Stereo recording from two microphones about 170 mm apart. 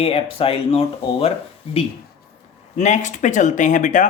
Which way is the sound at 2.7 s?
45° left (ahead or behind).